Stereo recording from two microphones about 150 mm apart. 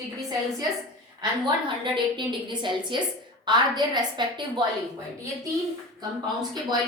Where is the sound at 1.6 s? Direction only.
35° right (ahead or behind).